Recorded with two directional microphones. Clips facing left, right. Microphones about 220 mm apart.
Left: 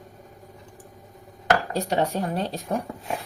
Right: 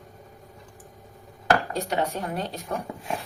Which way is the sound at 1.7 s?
35° left (ahead or behind).